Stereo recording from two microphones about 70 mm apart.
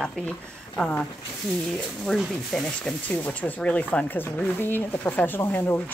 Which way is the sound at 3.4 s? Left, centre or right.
Centre.